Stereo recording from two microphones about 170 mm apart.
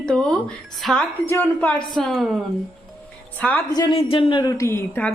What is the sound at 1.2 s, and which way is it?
A woman's voice, 10° left (ahead or behind).